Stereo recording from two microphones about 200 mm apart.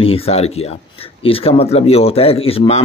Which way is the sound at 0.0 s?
30° left (ahead or behind).